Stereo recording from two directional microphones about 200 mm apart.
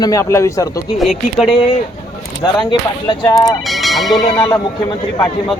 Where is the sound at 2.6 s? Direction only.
20° left (ahead or behind).